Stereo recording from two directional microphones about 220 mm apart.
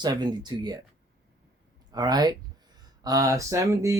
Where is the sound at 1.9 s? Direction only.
20° right (ahead or behind).